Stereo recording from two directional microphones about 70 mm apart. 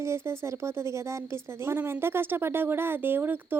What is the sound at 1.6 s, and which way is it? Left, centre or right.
Speech, right.